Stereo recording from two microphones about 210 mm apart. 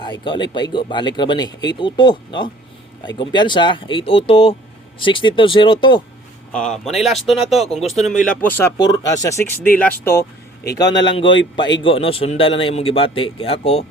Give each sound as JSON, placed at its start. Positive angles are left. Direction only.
{"t": 0.0, "sound": "speech", "side_deg": 20}
{"t": 6.5, "sound": "speech", "side_deg": 5}